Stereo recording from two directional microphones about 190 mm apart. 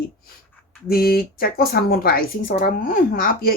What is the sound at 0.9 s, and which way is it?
Speech, 50° left (ahead or behind).